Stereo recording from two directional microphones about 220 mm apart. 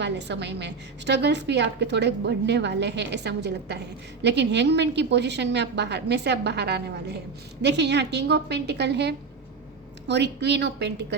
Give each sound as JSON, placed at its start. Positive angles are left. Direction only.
{"t": 0.0, "sound": "a woman's voice", "side_deg": -50}